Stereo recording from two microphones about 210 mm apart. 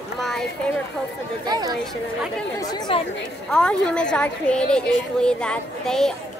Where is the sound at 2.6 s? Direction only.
20° left (ahead or behind).